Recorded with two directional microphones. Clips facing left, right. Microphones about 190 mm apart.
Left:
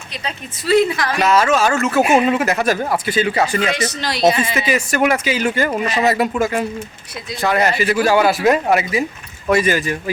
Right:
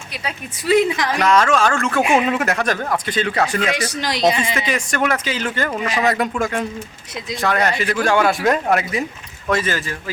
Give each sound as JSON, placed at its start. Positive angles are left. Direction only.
{"t": 0.1, "sound": "a woman's voice", "side_deg": -10}
{"t": 1.2, "sound": "speech", "side_deg": 5}
{"t": 3.7, "sound": "a woman's voice", "side_deg": -15}
{"t": 4.5, "sound": "speech", "side_deg": 5}